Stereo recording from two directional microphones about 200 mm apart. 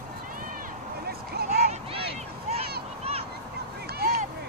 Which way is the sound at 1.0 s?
50° right (ahead or behind).